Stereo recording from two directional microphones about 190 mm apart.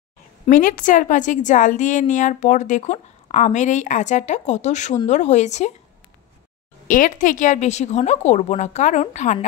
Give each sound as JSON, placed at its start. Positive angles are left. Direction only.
{"t": 0.5, "sound": "a woman's voice", "side_deg": 45}
{"t": 6.9, "sound": "a woman's voice", "side_deg": 45}